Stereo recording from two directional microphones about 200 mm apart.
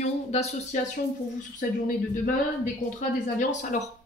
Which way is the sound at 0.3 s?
35° left (ahead or behind).